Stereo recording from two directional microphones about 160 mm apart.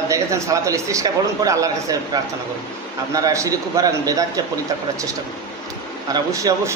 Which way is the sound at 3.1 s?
20° right (ahead or behind).